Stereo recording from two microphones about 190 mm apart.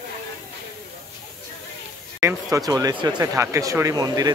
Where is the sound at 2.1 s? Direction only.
15° right (ahead or behind).